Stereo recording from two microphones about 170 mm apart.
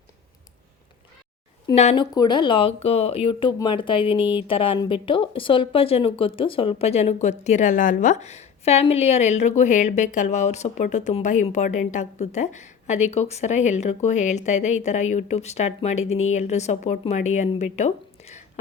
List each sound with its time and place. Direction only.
1.7 s speech: 40° left (ahead or behind)
2.1 s a woman's voice: 25° left (ahead or behind)